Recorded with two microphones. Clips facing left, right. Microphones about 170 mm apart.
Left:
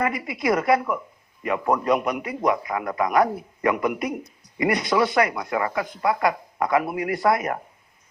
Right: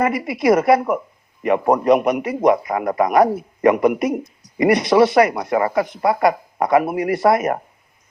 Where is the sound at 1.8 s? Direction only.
20° right (ahead or behind).